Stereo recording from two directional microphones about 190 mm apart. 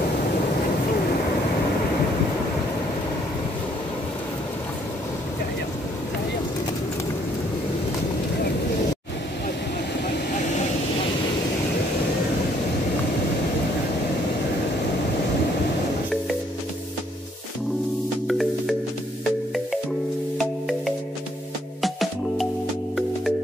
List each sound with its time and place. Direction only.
18.2 s music: centre (ahead or behind)
20.3 s music: centre (ahead or behind)